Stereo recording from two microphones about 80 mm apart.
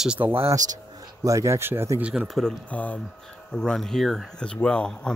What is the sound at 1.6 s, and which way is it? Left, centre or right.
Speech, right.